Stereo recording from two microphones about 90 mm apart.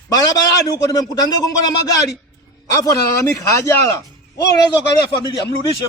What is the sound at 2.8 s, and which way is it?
Speech, 40° left (ahead or behind).